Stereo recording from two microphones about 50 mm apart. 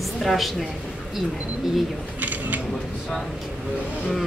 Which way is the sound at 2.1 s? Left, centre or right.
Right.